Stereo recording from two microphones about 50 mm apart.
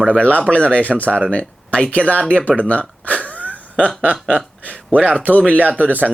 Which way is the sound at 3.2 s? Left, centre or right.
Left.